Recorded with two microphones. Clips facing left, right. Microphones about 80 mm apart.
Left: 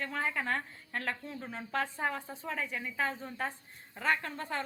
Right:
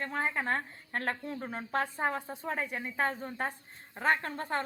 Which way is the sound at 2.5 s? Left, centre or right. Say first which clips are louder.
Right 2 dB; right.